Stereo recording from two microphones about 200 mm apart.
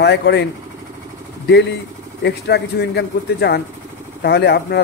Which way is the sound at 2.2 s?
55° left (ahead or behind).